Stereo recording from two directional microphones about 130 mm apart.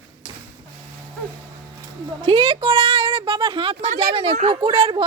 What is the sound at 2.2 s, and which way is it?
Speech, 45° right (ahead or behind).